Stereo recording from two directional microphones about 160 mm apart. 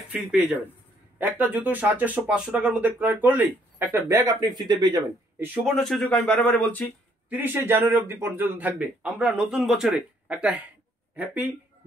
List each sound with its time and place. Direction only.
0.1 s a man's voice: 5° right (ahead or behind); by 5.0 s 25° right (ahead or behind)
5.4 s speech: 10° right (ahead or behind); by 6.8 s 10° left (ahead or behind)
7.2 s a man's voice: 10° right (ahead or behind)